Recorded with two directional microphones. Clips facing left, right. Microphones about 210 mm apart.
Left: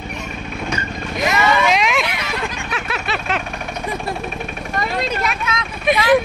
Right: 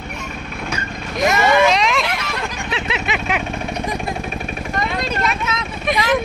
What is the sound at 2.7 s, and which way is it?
Vehicle, 25° right (ahead or behind).